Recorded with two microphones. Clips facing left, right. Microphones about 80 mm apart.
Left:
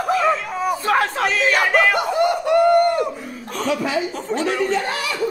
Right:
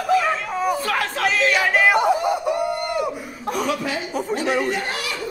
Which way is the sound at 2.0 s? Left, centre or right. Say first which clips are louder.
Even; left.